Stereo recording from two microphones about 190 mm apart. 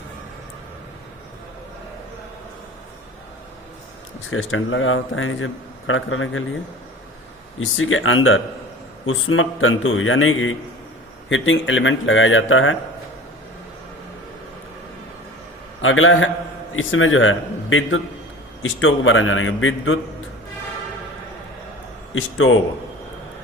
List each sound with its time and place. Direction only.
4.3 s speech: 90° left
7.6 s speech: 90° left
15.8 s speech: 90° left
22.1 s speech: 90° left